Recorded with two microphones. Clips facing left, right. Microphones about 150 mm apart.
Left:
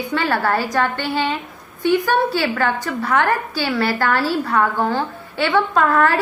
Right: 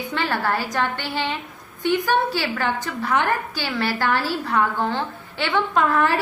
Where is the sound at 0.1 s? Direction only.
15° right (ahead or behind).